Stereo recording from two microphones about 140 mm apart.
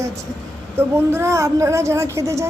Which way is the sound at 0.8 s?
15° right (ahead or behind).